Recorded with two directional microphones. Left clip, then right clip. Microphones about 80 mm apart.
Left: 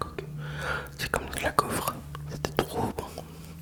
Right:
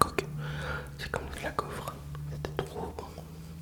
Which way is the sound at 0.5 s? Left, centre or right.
Left.